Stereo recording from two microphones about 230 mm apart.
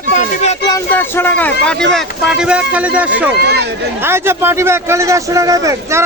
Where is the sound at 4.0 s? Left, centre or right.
Centre.